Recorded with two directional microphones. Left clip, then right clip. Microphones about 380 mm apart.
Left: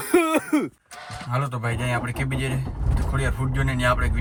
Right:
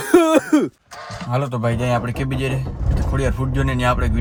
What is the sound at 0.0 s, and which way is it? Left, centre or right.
Throat clearing, centre.